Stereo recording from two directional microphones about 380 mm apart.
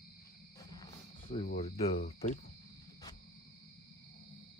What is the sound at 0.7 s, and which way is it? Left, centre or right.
Speech, centre.